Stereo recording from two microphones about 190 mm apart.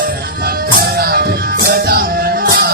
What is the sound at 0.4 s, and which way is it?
Music, 55° right (ahead or behind).